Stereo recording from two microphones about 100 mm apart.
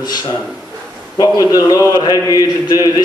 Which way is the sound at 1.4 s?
35° left (ahead or behind).